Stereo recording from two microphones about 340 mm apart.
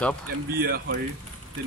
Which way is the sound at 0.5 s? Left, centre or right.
Right.